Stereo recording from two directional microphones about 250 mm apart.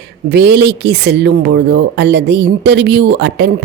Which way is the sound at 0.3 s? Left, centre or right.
Right.